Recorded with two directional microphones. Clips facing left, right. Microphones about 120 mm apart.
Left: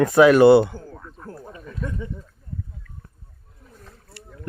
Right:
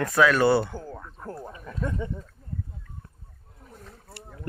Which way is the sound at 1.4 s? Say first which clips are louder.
Even; 25° right (ahead or behind).